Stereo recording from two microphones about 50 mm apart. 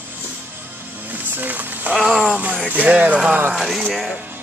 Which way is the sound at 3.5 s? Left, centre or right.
Centre.